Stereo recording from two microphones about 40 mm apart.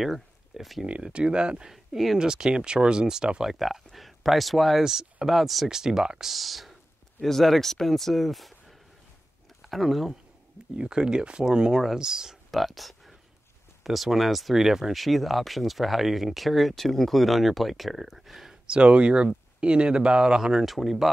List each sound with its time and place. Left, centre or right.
0.0 s speech: centre
0.8 s speech: right
1.7 s speech: centre
2.1 s speech: centre
3.4 s speech: centre
4.8 s speech: centre
5.7 s speech: centre
6.3 s speech: centre
10.8 s speech: right
12.4 s a sound: centre
13.8 s speech: centre
18.5 s speech: right
20.6 s speech: centre